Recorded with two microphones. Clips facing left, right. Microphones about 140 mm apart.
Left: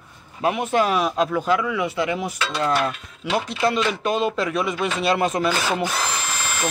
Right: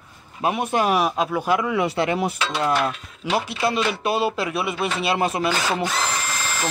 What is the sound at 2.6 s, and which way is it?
Cutlery, 15° right (ahead or behind).